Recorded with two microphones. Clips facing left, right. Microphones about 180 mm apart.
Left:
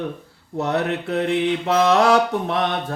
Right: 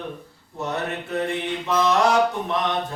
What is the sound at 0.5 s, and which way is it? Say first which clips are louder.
Mantra: left 6 dB; 65° left (ahead or behind).